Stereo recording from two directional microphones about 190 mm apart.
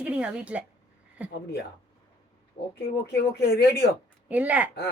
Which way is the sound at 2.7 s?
60° left (ahead or behind).